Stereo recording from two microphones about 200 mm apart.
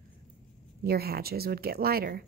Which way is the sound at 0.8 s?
50° right (ahead or behind).